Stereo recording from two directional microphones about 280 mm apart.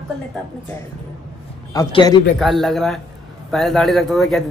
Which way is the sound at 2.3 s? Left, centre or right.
Centre.